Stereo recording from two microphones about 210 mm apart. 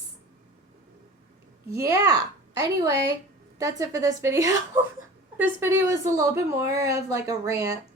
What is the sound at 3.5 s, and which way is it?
A woman's voice, 15° right (ahead or behind).